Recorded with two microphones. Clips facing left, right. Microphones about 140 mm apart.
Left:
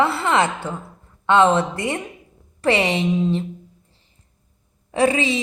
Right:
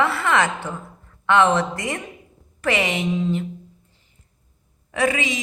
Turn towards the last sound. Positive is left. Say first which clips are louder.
# left 4 dB
turn(degrees=30)  # may be behind; listen again after turning